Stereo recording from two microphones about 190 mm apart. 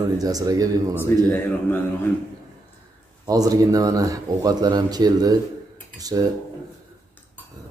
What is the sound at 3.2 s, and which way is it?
Speech, 20° right (ahead or behind).